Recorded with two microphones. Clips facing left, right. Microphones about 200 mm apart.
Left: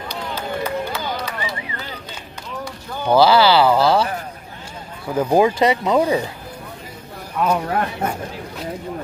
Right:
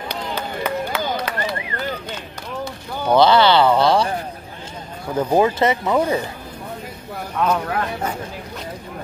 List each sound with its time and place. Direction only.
0.7 s run: 60° right (ahead or behind)
3.1 s speech: 5° left (ahead or behind)
5.1 s speech: 10° left (ahead or behind)
7.4 s speech: 5° left (ahead or behind)